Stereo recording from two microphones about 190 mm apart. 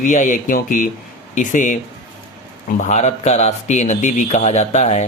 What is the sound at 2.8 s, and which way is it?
A man's voice, 40° left (ahead or behind).